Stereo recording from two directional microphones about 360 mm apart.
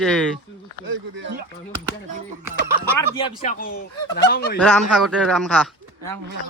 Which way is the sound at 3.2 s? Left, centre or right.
Centre.